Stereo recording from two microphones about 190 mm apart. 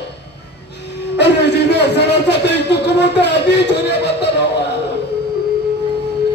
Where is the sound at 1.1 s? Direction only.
65° left (ahead or behind).